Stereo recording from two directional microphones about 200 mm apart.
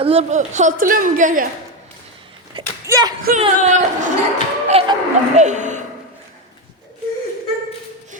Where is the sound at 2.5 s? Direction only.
20° right (ahead or behind).